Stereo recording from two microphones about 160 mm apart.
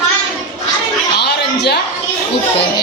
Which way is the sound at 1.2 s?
90° left.